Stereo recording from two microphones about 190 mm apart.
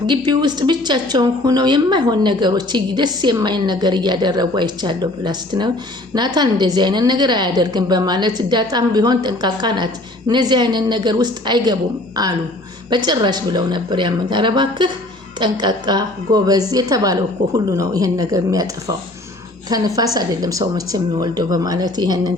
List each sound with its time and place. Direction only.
0.1 s a woman's voice: 25° right (ahead or behind)